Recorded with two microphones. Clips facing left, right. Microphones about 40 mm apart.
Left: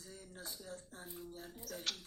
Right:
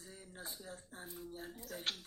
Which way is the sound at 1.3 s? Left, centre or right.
Right.